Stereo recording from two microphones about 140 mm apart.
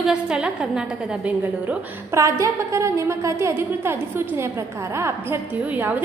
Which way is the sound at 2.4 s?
20° right (ahead or behind).